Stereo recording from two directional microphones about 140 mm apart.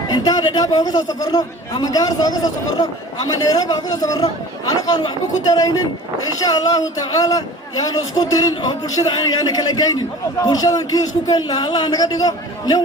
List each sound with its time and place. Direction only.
0.1 s a man's voice: 30° left (ahead or behind)